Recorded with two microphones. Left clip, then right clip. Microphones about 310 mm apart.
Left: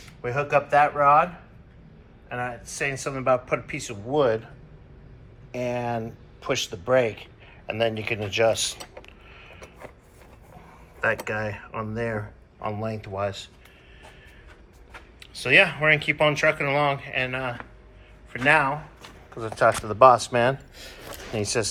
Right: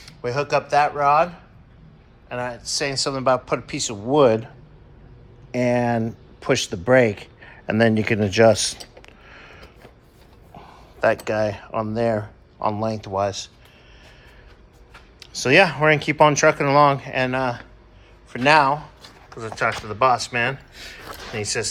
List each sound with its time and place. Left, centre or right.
0.2 s a man's voice: centre
2.3 s a man's voice: centre
4.1 s speech: right
5.5 s speech: right
11.4 s speech: centre
14.9 s speech: centre
19.4 s speech: centre